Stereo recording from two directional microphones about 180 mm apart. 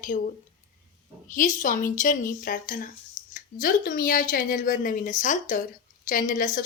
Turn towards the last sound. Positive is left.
turn(degrees=50)  # may be behind; listen again after turning